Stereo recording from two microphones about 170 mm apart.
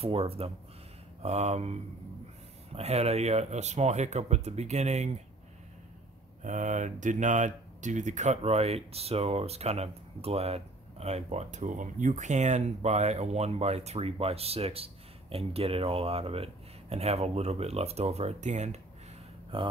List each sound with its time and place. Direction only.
0.0 s speech: 35° right (ahead or behind)
6.4 s speech: 45° right (ahead or behind)
19.5 s speech: 30° right (ahead or behind)